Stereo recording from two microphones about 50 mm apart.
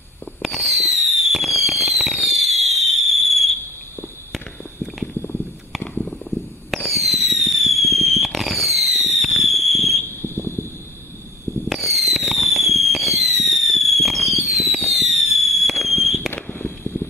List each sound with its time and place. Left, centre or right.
0.4 s fireworks: centre
6.7 s fireworks: centre
10.0 s a sound: left
11.7 s fireworks: centre